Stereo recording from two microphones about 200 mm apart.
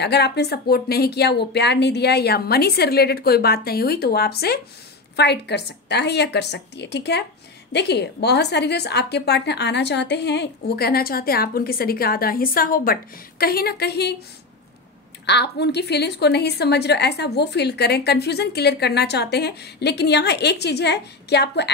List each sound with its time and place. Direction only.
0.0 s a woman's voice: 55° left (ahead or behind)
15.2 s a woman's voice: 55° left (ahead or behind)